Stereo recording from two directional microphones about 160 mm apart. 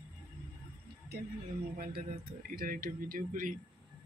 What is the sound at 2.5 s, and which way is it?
Speech, 65° right (ahead or behind).